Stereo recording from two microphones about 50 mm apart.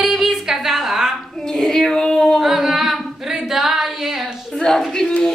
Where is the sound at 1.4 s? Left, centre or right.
Centre.